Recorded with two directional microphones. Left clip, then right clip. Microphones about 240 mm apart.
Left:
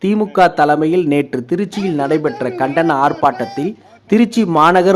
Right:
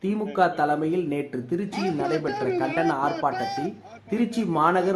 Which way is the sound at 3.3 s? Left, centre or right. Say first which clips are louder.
Left 6 dB; centre.